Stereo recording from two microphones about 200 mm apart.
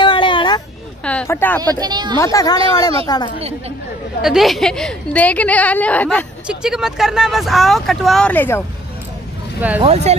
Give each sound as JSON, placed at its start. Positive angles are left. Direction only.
{"t": 0.0, "sound": "a sound", "side_deg": 25}
{"t": 1.0, "sound": "speech", "side_deg": 10}
{"t": 1.6, "sound": "a woman's voice", "side_deg": -20}
{"t": 2.1, "sound": "a woman's voice", "side_deg": 15}
{"t": 4.2, "sound": "a woman's voice", "side_deg": 0}
{"t": 6.4, "sound": "speech", "side_deg": -5}
{"t": 9.8, "sound": "speech", "side_deg": -30}